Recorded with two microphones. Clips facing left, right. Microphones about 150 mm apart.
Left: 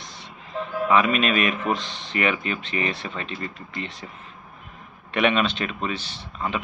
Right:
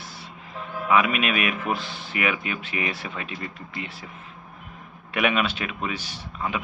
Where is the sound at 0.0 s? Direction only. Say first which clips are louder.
Right 1 dB; 10° right (ahead or behind).